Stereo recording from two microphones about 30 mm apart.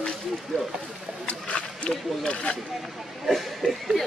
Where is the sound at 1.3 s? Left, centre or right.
Left.